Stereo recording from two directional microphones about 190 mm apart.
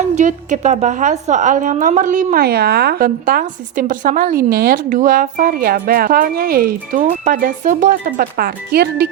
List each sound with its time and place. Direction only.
0.0 s a woman's voice: 40° right (ahead or behind); by 9.0 s 55° right (ahead or behind)